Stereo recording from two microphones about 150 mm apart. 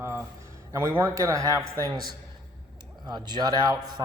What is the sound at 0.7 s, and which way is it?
Speech, 20° right (ahead or behind).